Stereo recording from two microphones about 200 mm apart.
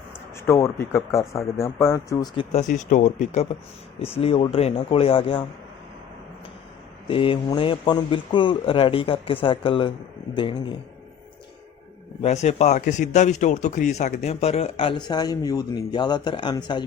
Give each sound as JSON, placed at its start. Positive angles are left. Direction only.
{"t": 0.3, "sound": "speech", "side_deg": 15}
{"t": 7.1, "sound": "speech", "side_deg": 25}
{"t": 12.2, "sound": "speech", "side_deg": 35}